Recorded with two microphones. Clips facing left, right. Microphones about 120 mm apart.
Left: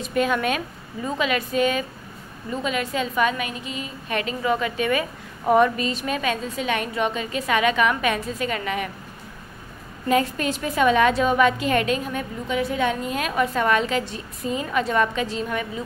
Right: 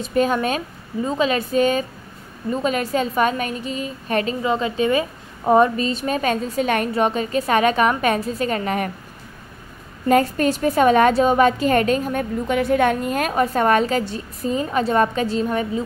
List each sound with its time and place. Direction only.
0.1 s a woman's voice: 35° right (ahead or behind)
4.4 s a woman's voice: 25° right (ahead or behind); by 8.9 s 45° right (ahead or behind)
10.0 s a woman's voice: 45° right (ahead or behind)